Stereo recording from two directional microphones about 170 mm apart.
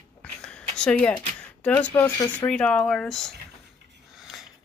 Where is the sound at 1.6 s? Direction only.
10° left (ahead or behind).